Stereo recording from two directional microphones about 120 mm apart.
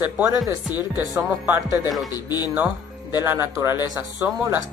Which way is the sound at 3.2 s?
20° right (ahead or behind).